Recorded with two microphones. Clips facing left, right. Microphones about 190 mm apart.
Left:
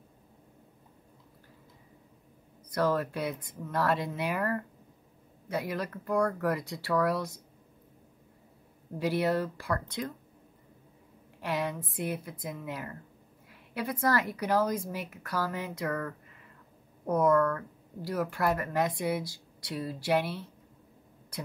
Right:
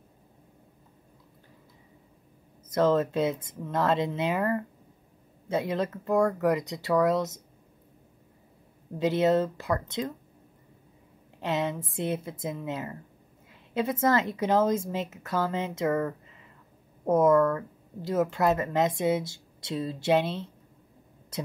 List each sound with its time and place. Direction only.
2.7 s speech: 20° right (ahead or behind)
8.9 s speech: 20° right (ahead or behind)
11.4 s speech: 25° right (ahead or behind)
21.3 s a sound: 25° right (ahead or behind)